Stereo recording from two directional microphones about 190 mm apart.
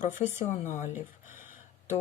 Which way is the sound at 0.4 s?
40° left (ahead or behind).